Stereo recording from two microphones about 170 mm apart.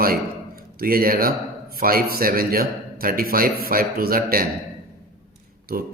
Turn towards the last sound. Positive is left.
turn(degrees=-60)  # may be behind; listen again after turning